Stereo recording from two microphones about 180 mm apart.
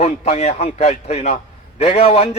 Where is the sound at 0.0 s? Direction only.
35° left (ahead or behind).